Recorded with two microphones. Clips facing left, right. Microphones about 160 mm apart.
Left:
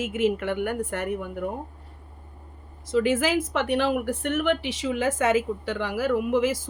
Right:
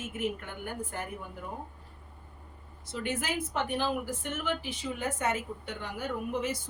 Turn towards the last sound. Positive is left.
turn(degrees=90)